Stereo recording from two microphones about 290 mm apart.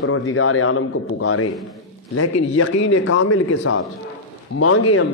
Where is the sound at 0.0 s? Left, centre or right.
Left.